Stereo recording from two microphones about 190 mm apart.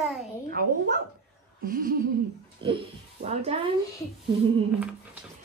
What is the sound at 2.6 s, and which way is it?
A child's voice, 30° right (ahead or behind).